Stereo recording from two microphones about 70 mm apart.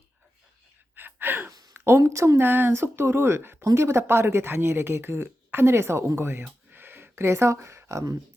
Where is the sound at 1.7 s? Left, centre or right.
Right.